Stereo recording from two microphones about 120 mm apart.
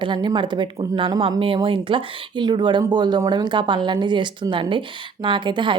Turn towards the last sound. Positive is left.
turn(degrees=-40)  # may be behind; listen again after turning